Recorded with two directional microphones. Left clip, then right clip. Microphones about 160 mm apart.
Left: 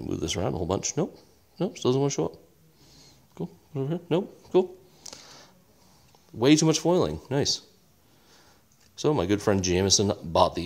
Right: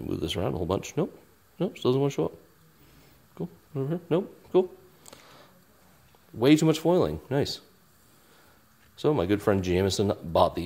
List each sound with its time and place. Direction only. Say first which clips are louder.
0.0 s speech: left 1 dB; 10° left (ahead or behind)
3.3 s speech: even; 15° left (ahead or behind)
5.1 s a sound: left 4 dB; 20° left (ahead or behind)
6.3 s speech: even; 10° left (ahead or behind)
9.0 s speech: even; 15° left (ahead or behind)